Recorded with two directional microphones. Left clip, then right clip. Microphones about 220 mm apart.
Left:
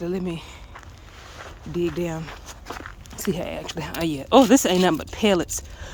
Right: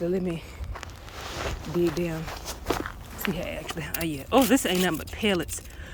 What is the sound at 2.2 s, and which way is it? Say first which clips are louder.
Walk: right 5 dB; 45° right (ahead or behind).